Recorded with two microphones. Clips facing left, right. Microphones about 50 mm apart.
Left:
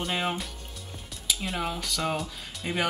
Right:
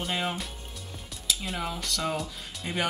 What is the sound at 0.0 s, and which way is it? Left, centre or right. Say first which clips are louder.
Speech: left 1 dB; centre.